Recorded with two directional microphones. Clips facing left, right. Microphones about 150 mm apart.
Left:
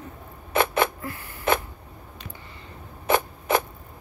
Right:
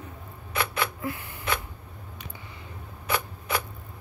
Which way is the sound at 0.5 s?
45° left (ahead or behind).